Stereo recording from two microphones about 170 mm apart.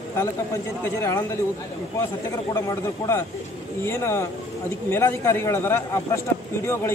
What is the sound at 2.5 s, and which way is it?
A man's voice, 15° left (ahead or behind).